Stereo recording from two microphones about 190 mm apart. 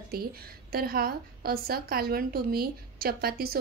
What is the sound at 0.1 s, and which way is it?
A woman's voice, 55° right (ahead or behind).